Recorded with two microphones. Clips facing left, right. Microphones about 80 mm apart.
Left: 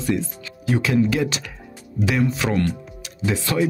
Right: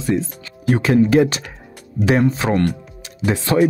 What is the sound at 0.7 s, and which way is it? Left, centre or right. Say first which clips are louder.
Speech: right 6 dB; right.